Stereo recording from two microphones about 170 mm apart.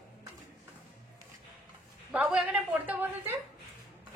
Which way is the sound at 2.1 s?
5° right (ahead or behind).